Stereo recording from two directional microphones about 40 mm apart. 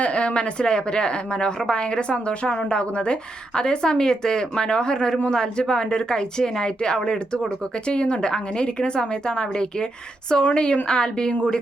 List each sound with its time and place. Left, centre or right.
0.0 s a woman's voice: left